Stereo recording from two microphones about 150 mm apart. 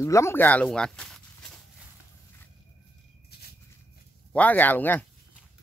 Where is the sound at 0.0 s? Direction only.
20° left (ahead or behind).